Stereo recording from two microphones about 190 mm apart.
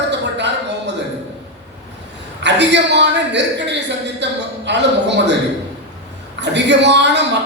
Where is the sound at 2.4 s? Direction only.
65° right (ahead or behind).